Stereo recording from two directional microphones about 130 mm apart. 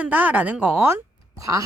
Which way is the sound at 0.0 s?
10° right (ahead or behind).